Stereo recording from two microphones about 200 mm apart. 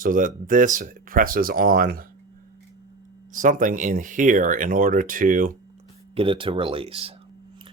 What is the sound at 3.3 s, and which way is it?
Speech, 40° right (ahead or behind).